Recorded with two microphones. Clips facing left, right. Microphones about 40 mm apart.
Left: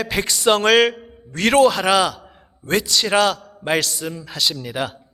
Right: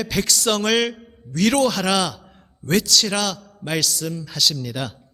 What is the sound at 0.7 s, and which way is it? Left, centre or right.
A man's voice, centre.